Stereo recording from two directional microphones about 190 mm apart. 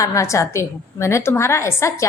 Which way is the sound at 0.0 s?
15° left (ahead or behind).